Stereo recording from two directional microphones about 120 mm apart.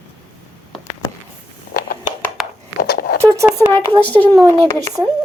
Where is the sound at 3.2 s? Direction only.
25° right (ahead or behind).